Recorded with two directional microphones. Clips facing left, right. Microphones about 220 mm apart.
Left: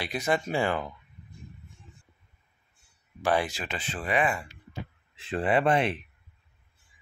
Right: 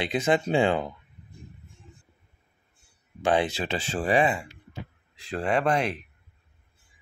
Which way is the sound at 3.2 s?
20° right (ahead or behind).